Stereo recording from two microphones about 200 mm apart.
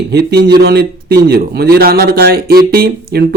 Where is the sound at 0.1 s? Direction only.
55° right (ahead or behind).